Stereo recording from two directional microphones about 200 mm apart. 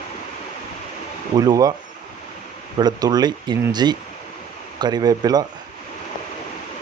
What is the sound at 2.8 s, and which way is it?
Speech, 20° right (ahead or behind).